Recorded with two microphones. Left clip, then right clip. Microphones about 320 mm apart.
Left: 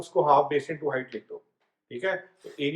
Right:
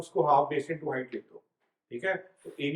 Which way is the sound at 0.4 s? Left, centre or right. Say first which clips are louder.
Left 4 dB; centre.